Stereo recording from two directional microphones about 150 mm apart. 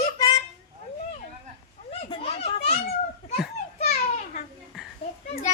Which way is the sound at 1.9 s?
40° left (ahead or behind).